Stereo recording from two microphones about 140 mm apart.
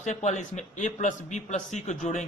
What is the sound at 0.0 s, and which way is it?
Speech, 55° left (ahead or behind).